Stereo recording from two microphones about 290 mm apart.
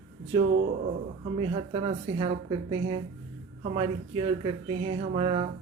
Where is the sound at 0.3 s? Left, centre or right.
Centre.